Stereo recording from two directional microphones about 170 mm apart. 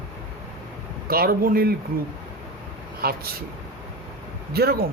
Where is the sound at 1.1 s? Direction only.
60° right (ahead or behind).